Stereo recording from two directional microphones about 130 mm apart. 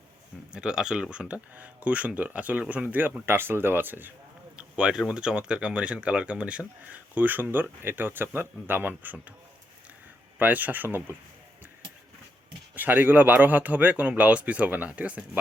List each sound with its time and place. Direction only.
0.5 s speech: 5° right (ahead or behind)
10.3 s speech: 15° right (ahead or behind)
12.7 s speech: 15° right (ahead or behind)